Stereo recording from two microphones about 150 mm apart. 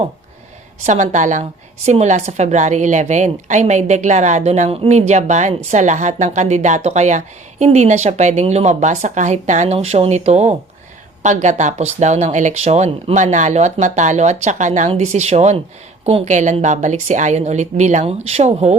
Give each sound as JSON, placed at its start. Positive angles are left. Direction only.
{"t": 0.9, "sound": "a woman's voice", "side_deg": -55}